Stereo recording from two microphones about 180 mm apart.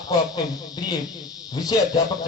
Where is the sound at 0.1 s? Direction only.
25° left (ahead or behind).